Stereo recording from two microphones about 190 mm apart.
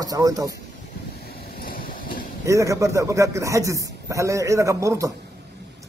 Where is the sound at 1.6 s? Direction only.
50° left (ahead or behind).